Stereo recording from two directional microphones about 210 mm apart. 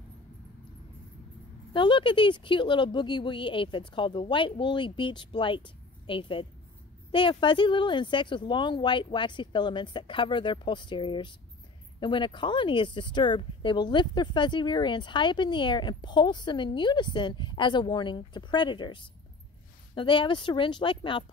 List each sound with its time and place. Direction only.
1.7 s speech: 25° left (ahead or behind)